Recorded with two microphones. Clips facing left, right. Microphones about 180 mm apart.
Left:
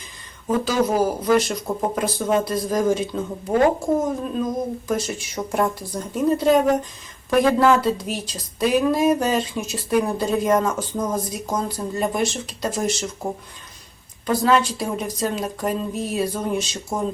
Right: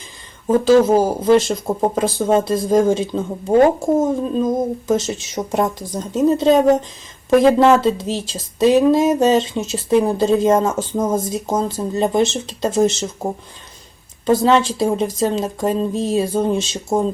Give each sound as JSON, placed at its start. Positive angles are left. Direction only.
{"t": 0.4, "sound": "speech", "side_deg": -25}
{"t": 14.3, "sound": "speech", "side_deg": -25}